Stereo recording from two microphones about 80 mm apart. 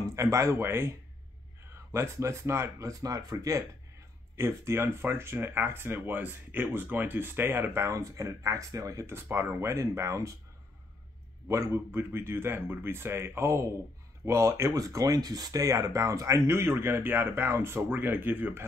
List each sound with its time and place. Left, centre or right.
0.0 s speech: right
2.0 s speech: right
4.4 s speech: right
11.4 s speech: right